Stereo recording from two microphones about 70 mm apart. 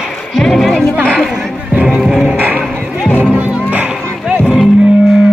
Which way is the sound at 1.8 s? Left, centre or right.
Centre.